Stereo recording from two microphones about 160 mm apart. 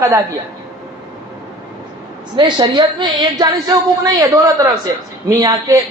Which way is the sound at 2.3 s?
30° right (ahead or behind).